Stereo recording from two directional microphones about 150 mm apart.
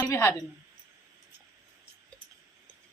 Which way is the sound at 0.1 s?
20° left (ahead or behind).